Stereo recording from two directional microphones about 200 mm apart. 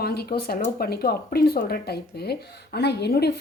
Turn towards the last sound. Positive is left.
turn(degrees=50)  # may be behind; listen again after turning